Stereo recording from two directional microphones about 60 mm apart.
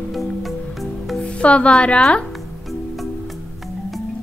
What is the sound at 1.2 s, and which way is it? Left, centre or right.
Speech, centre.